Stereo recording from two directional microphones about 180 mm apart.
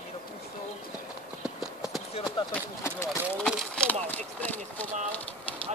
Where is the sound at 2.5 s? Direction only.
15° left (ahead or behind).